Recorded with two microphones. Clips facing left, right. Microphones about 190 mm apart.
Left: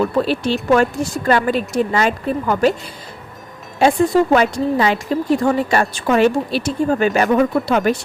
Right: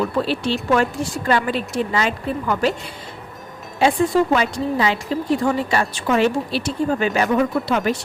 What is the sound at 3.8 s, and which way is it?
Speech, 45° left (ahead or behind).